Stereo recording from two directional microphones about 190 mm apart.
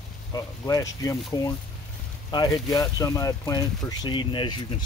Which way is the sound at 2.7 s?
15° left (ahead or behind).